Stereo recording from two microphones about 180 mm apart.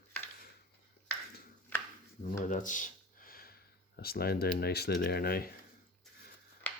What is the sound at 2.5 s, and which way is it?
Speech, 45° left (ahead or behind).